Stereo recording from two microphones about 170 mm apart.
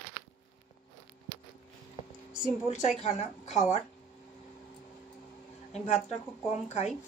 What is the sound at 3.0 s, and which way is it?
Speech, 40° left (ahead or behind).